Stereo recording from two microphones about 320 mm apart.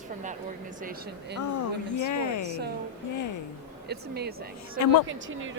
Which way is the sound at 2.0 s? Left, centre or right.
Left.